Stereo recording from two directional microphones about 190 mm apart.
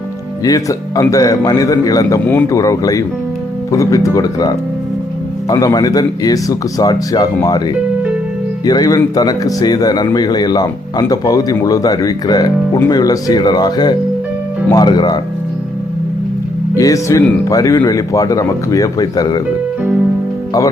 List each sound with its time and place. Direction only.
0.4 s speech: 20° left (ahead or behind)
8.6 s speech: 20° left (ahead or behind)
16.7 s speech: 15° left (ahead or behind)